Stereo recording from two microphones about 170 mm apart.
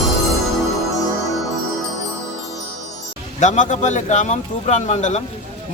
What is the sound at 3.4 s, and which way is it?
A man's voice, 45° left (ahead or behind).